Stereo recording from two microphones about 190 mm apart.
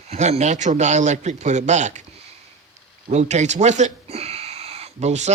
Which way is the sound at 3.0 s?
40° right (ahead or behind).